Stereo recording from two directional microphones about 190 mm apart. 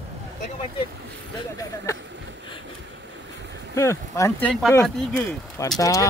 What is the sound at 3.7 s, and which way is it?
Speech, 15° left (ahead or behind).